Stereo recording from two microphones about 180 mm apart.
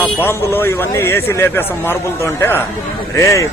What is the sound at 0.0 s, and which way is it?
A man's voice, 10° left (ahead or behind).